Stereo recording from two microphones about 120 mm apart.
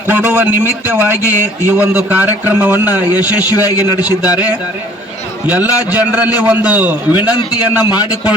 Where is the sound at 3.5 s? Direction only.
30° left (ahead or behind).